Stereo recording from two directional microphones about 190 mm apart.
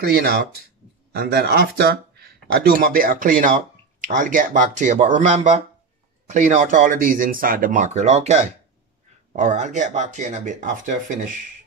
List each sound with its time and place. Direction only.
0.1 s speech: 55° right (ahead or behind)